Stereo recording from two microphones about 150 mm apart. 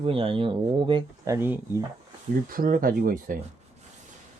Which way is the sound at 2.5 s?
70° right (ahead or behind).